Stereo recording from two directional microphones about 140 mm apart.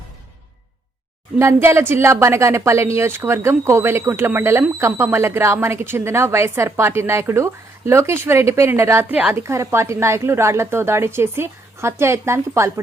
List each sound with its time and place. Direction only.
1.4 s a woman's voice: 20° right (ahead or behind)